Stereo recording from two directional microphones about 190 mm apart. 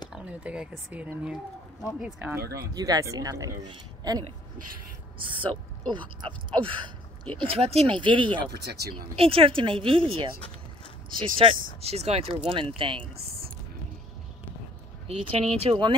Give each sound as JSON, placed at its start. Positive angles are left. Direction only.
{"t": 0.1, "sound": "a sound", "side_deg": -5}
{"t": 0.9, "sound": "speech", "side_deg": -5}
{"t": 2.4, "sound": "speech", "side_deg": -55}
{"t": 2.7, "sound": "speech", "side_deg": -20}
{"t": 8.5, "sound": "speech", "side_deg": -60}
{"t": 9.1, "sound": "speech", "side_deg": -30}
{"t": 15.0, "sound": "speech", "side_deg": -25}